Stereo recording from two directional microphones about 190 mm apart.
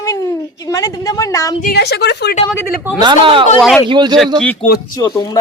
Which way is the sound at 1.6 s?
60° left (ahead or behind).